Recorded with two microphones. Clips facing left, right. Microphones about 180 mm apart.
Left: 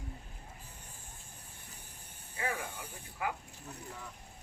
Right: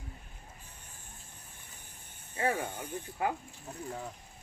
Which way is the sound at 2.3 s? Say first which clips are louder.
Right 6 dB; 30° right (ahead or behind).